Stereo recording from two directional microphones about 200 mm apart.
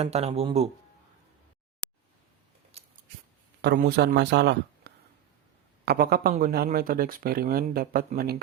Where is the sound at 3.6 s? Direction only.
55° right (ahead or behind).